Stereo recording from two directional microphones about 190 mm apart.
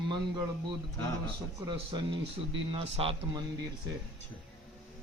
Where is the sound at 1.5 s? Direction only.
20° right (ahead or behind).